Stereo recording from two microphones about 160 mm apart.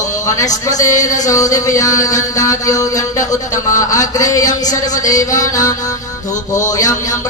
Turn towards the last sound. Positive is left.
turn(degrees=20)  # may be behind; listen again after turning